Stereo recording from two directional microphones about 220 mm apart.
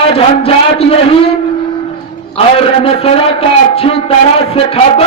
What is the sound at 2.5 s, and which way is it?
A man's voice, 25° left (ahead or behind).